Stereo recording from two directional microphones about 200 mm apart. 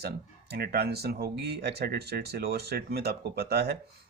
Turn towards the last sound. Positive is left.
turn(degrees=-55)  # may be behind; listen again after turning